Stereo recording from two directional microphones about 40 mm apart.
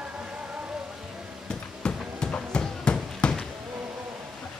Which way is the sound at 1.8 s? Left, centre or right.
Left.